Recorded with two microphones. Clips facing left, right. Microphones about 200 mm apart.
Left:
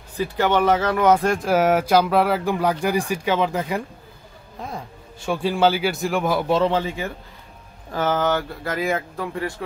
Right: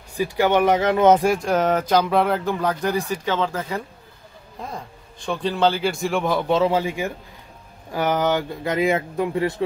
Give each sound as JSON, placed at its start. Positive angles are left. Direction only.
{"t": 0.2, "sound": "speech", "side_deg": -15}
{"t": 1.2, "sound": "a man's voice", "side_deg": -5}
{"t": 1.5, "sound": "speech", "side_deg": 5}
{"t": 5.2, "sound": "a man's voice", "side_deg": 10}